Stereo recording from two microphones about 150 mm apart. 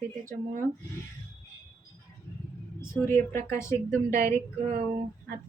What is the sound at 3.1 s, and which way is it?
Speech, 20° left (ahead or behind).